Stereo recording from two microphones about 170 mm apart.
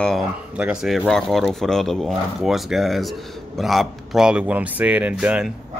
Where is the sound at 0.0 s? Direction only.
Centre (ahead or behind).